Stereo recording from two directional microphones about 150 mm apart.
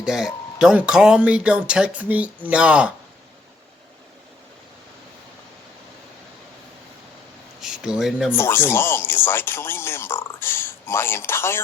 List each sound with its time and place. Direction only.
0.0 s speech: 5° right (ahead or behind)
7.6 s a sound: 5° right (ahead or behind)
8.3 s speech: 15° left (ahead or behind)